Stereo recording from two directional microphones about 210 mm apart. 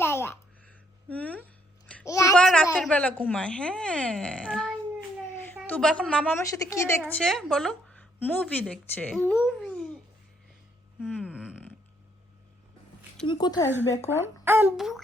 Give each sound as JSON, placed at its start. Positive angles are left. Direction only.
{"t": 0.0, "sound": "a sound", "side_deg": 10}
{"t": 1.1, "sound": "a woman's voice", "side_deg": 5}
{"t": 1.9, "sound": "babbling", "side_deg": 10}
{"t": 2.3, "sound": "a sound", "side_deg": 0}
{"t": 2.7, "sound": "a woman's voice", "side_deg": 5}
{"t": 7.1, "sound": "a woman's voice", "side_deg": 0}
{"t": 11.0, "sound": "a sound", "side_deg": 0}
{"t": 13.2, "sound": "a woman's voice", "side_deg": 20}
{"t": 14.1, "sound": "speech", "side_deg": -10}